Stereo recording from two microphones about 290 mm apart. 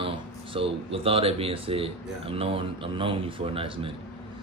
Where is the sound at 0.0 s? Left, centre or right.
Centre.